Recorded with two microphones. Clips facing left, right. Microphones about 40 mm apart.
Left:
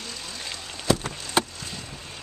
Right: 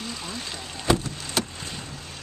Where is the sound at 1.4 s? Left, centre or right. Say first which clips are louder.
Left 4 dB; left.